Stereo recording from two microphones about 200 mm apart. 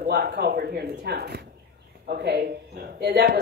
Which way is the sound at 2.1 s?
50° right (ahead or behind).